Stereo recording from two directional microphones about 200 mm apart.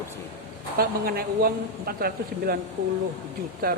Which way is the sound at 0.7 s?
50° right (ahead or behind).